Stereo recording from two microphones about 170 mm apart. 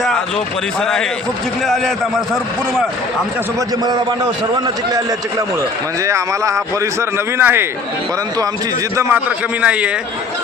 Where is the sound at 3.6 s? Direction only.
25° right (ahead or behind).